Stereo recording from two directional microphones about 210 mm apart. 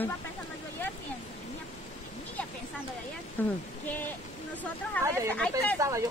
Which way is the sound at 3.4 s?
10° left (ahead or behind).